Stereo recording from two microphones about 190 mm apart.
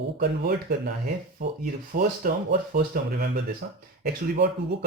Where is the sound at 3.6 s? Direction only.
50° right (ahead or behind).